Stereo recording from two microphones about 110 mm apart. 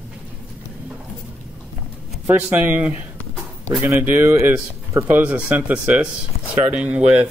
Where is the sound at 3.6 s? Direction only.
30° right (ahead or behind).